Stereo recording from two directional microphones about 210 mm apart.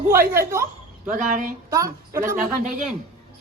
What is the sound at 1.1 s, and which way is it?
Speech, 40° right (ahead or behind).